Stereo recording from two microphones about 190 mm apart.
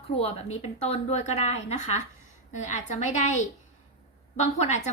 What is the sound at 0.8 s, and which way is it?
A woman's voice, 35° left (ahead or behind).